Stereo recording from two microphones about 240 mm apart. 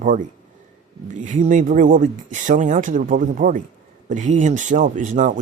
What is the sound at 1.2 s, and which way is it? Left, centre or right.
Speech, right.